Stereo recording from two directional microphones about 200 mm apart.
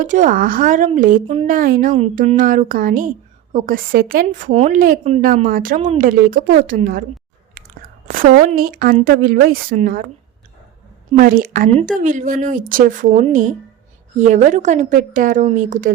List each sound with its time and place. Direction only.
0.0 s a woman's voice: 40° right (ahead or behind)
7.6 s chewing: 45° right (ahead or behind)
8.0 s a sound: 45° right (ahead or behind)
8.4 s a woman's voice: 45° right (ahead or behind)
11.1 s a woman's voice: 45° right (ahead or behind)